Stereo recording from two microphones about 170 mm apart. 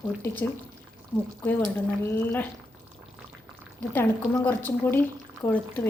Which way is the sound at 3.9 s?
10° left (ahead or behind).